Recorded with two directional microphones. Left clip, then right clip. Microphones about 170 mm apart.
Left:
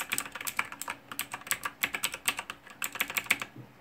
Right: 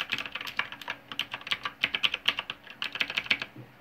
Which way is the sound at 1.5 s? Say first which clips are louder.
Right 2 dB; 30° left (ahead or behind).